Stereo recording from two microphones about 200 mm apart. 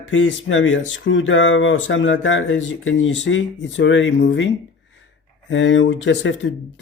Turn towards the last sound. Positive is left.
turn(degrees=70)  # may be behind; listen again after turning